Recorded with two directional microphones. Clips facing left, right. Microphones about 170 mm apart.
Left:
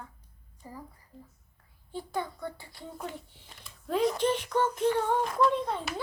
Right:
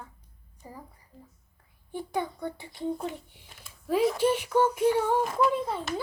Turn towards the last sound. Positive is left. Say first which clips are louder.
# even
turn(degrees=-5)  # may be behind; listen again after turning